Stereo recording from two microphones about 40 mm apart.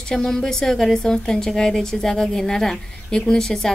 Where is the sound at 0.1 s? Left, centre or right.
Centre.